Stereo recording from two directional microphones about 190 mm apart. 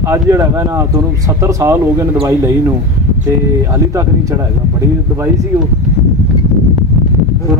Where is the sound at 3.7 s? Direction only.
15° right (ahead or behind).